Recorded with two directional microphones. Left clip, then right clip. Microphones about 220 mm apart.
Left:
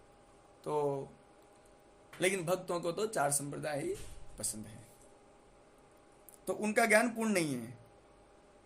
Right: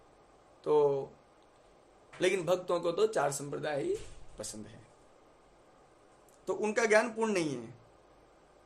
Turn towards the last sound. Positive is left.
turn(degrees=35)  # may be behind; listen again after turning